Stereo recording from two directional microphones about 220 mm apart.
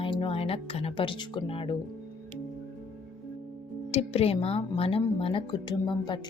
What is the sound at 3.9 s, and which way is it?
A woman's voice, 25° left (ahead or behind).